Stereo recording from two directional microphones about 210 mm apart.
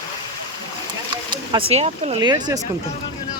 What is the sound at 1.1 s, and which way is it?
Speech, 25° right (ahead or behind).